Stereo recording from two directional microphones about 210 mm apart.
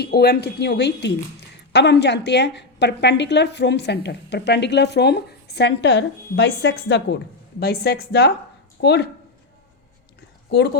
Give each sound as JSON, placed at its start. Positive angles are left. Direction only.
{"t": 0.0, "sound": "a woman's voice", "side_deg": 50}